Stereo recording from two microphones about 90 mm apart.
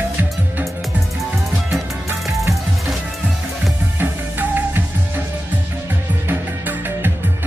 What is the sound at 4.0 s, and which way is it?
Music, 20° right (ahead or behind).